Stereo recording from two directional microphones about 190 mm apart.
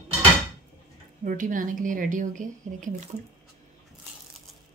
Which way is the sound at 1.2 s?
45° right (ahead or behind).